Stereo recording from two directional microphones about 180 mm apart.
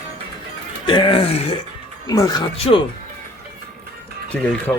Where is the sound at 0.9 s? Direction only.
25° left (ahead or behind).